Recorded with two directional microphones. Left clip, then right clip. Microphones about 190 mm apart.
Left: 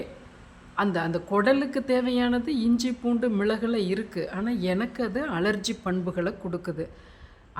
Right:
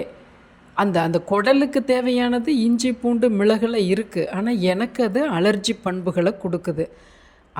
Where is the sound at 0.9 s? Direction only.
25° right (ahead or behind).